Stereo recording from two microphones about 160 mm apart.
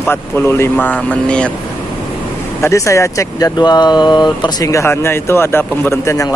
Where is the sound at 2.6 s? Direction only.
20° left (ahead or behind).